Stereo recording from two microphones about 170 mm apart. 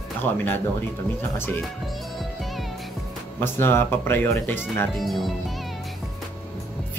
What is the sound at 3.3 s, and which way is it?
Speech, 15° left (ahead or behind).